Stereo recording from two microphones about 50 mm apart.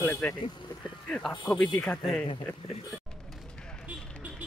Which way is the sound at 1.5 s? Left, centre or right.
Left.